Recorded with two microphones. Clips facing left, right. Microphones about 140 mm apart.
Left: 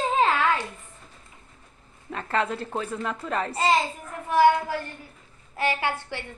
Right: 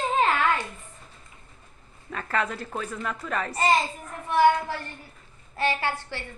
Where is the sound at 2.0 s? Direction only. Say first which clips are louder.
Left 2 dB; 25° left (ahead or behind).